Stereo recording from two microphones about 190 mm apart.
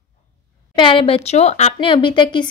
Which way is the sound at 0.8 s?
25° left (ahead or behind).